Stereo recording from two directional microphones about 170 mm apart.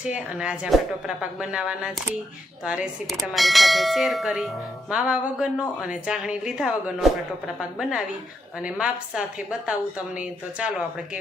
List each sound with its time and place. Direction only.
0.0 s a woman's voice: 5° right (ahead or behind)